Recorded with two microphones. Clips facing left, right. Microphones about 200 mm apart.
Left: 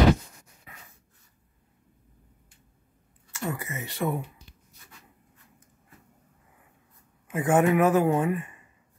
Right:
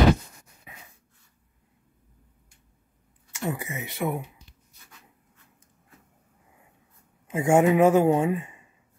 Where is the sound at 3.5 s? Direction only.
20° right (ahead or behind).